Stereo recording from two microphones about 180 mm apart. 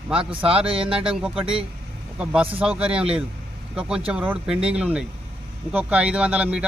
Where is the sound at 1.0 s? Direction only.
5° right (ahead or behind).